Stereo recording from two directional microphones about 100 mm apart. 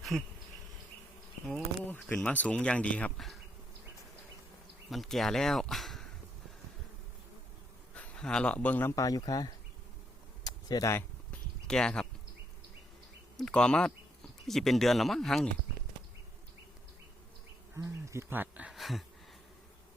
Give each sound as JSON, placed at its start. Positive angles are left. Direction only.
{"t": 0.1, "sound": "speech", "side_deg": 0}
{"t": 2.1, "sound": "speech", "side_deg": 10}
{"t": 4.9, "sound": "speech", "side_deg": 0}
{"t": 7.9, "sound": "a man's voice", "side_deg": 10}
{"t": 9.0, "sound": "speech", "side_deg": 40}
{"t": 10.4, "sound": "a sound", "side_deg": 40}
{"t": 11.3, "sound": "a sound", "side_deg": 10}
{"t": 13.3, "sound": "speech", "side_deg": 10}
{"t": 17.7, "sound": "speech", "side_deg": -30}
{"t": 18.7, "sound": "a sound", "side_deg": 0}